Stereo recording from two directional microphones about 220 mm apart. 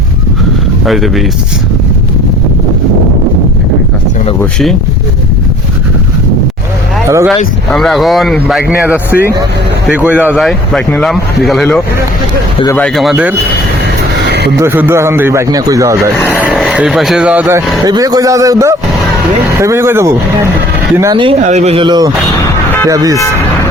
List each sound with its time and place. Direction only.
0.9 s speech: centre (ahead or behind)
7.7 s speech: centre (ahead or behind)
14.3 s a sound: 50° right (ahead or behind)
14.6 s speech: 10° right (ahead or behind)
16.3 s speech: 5° right (ahead or behind)
17.8 s speech: 15° right (ahead or behind)
21.4 s speech: 30° right (ahead or behind); by 23.1 s 15° right (ahead or behind)